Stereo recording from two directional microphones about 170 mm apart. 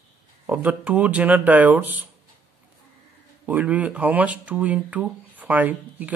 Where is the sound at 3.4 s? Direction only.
10° right (ahead or behind).